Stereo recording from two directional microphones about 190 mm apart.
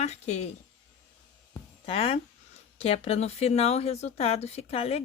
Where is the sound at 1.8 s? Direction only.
30° left (ahead or behind).